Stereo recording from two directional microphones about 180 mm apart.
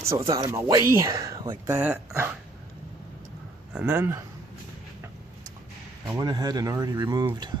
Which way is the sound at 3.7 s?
5° right (ahead or behind).